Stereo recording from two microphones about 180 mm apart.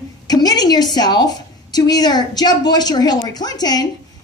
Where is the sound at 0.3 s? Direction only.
20° left (ahead or behind).